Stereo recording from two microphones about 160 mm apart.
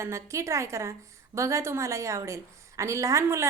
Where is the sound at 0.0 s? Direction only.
15° right (ahead or behind).